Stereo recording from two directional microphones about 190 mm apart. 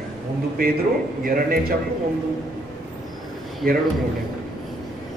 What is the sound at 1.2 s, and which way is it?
Speech, 50° right (ahead or behind).